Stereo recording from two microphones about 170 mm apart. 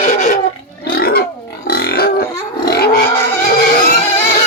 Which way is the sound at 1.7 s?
65° left (ahead or behind).